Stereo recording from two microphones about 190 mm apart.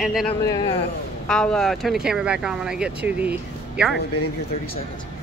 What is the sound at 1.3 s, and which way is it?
Speech, 5° left (ahead or behind).